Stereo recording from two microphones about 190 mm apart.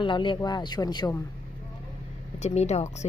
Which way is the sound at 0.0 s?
25° left (ahead or behind).